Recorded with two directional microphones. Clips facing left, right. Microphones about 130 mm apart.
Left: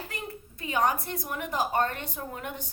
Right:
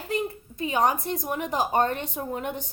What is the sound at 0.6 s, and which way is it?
A woman's voice, 20° right (ahead or behind).